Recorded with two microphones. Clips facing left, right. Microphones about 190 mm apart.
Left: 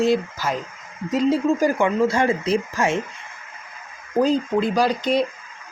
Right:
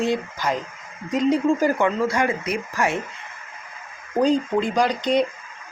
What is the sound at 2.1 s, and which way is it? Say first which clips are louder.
Speech: left 3 dB; 25° left (ahead or behind).